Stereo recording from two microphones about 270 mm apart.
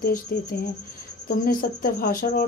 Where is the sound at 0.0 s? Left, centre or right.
Left.